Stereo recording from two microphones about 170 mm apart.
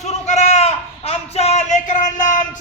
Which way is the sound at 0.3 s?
40° left (ahead or behind).